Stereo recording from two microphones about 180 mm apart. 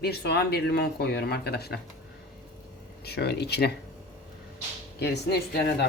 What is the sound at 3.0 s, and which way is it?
Speech, 65° left (ahead or behind).